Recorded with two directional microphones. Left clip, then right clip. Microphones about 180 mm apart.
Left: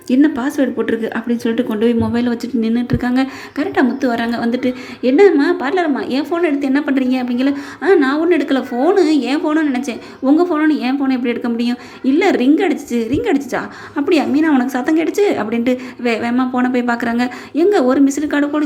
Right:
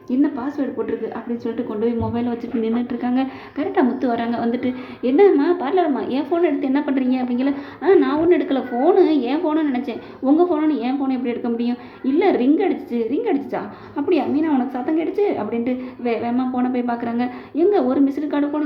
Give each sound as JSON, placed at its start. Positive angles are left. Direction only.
{"t": 0.1, "sound": "a woman's voice", "side_deg": 40}